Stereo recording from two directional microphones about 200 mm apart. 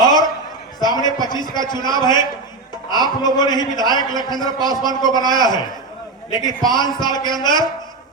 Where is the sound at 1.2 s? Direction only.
20° left (ahead or behind).